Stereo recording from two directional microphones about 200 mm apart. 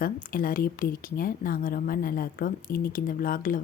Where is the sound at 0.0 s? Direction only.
45° left (ahead or behind).